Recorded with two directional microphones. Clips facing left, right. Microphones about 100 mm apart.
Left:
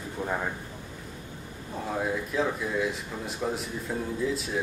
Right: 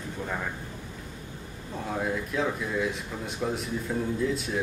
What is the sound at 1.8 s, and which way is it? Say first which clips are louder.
Speech: even; centre (ahead or behind).